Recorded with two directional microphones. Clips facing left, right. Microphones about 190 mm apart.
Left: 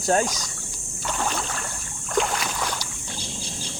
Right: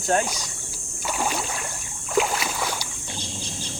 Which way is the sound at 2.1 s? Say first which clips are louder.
Right 1 dB; 5° right (ahead or behind).